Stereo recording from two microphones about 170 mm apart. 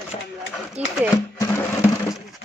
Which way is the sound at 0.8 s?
40° right (ahead or behind).